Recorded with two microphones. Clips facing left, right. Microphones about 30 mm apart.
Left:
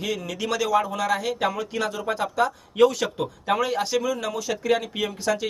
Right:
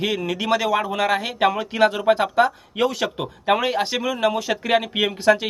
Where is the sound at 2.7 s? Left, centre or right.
Centre.